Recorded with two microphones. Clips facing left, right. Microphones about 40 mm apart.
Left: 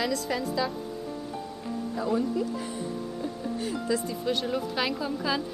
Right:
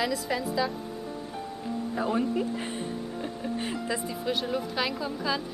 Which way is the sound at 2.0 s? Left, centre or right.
Right.